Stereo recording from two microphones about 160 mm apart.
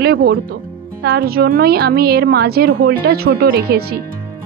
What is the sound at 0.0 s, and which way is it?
A woman's voice, 80° right.